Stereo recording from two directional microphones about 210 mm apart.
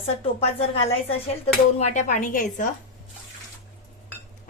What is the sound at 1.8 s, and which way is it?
Speech, 35° left (ahead or behind).